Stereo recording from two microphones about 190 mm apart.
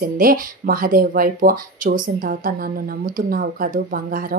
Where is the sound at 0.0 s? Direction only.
50° right (ahead or behind).